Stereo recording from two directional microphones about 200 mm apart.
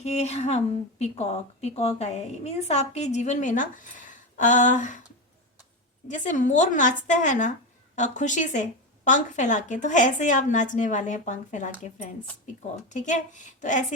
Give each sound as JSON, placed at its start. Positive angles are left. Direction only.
{"t": 0.0, "sound": "speech", "side_deg": 35}
{"t": 6.1, "sound": "speech", "side_deg": 40}
{"t": 12.9, "sound": "speech", "side_deg": 40}